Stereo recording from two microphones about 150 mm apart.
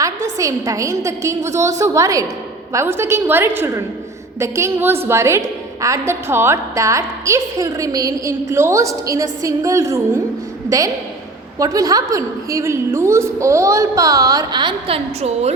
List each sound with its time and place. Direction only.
0.0 s a woman's voice: 20° right (ahead or behind); by 15.5 s 45° right (ahead or behind)